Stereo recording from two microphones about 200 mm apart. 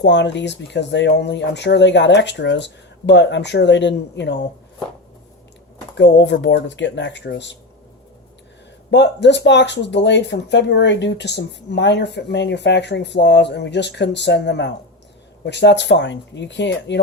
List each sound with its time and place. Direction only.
0.0 s speech: 60° left (ahead or behind)
6.0 s speech: 60° left (ahead or behind)
8.9 s speech: 60° left (ahead or behind)